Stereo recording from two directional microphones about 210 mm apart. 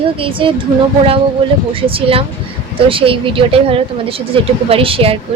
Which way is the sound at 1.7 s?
25° right (ahead or behind).